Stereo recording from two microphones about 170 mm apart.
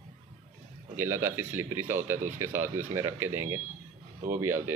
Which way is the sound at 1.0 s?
10° right (ahead or behind).